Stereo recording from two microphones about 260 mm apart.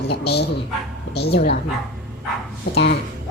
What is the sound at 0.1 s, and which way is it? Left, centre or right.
A woman's voice, left.